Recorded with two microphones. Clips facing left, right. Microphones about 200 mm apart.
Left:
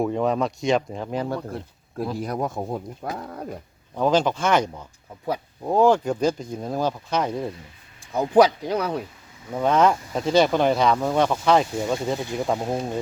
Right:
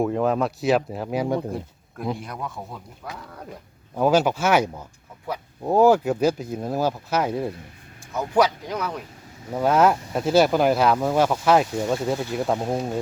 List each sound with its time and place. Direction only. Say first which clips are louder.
0.0 s speech: right 1 dB; centre (ahead or behind)
2.2 s speech: left 7 dB; 40° left (ahead or behind)
3.9 s speech: right 1 dB; 10° right (ahead or behind)
8.1 s speech: left 4 dB; 30° left (ahead or behind)
9.5 s speech: right 1 dB; 5° right (ahead or behind)